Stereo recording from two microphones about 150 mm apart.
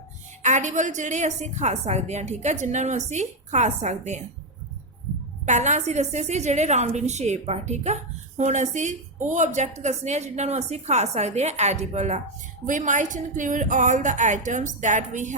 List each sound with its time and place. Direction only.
0.4 s a woman's voice: 55° right (ahead or behind)
5.5 s a woman's voice: 50° right (ahead or behind)